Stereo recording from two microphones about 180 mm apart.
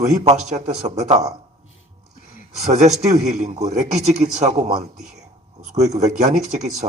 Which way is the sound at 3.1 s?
40° right (ahead or behind).